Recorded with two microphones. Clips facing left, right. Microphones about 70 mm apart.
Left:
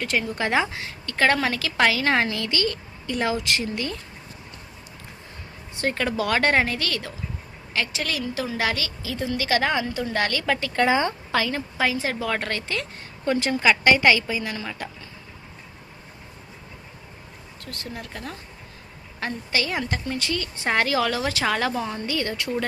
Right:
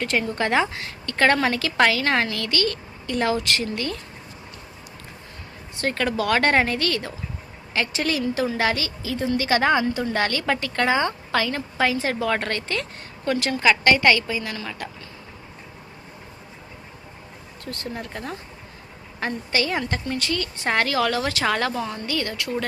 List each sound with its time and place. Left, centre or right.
0.0 s a woman's voice: centre
5.8 s a woman's voice: centre
10.8 s a woman's voice: centre
13.3 s a woman's voice: centre
13.6 s a woman's voice: centre
17.7 s a woman's voice: centre
19.5 s a woman's voice: centre